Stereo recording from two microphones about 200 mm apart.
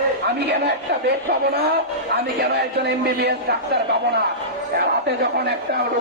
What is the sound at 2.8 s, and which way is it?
Speech, 55° right (ahead or behind).